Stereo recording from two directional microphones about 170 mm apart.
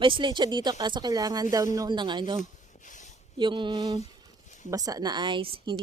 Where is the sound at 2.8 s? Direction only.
50° left (ahead or behind).